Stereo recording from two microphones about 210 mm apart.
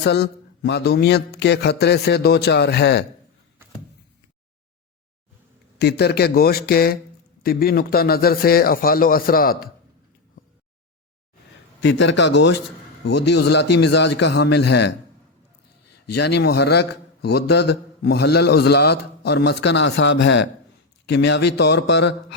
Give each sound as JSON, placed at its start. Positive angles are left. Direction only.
{"t": 0.0, "sound": "a man's voice", "side_deg": 50}
{"t": 5.8, "sound": "a man's voice", "side_deg": 50}
{"t": 11.8, "sound": "a man's voice", "side_deg": 60}
{"t": 16.1, "sound": "a man's voice", "side_deg": 55}